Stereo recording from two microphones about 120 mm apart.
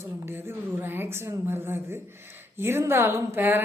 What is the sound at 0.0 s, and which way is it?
A woman's voice, 20° right (ahead or behind).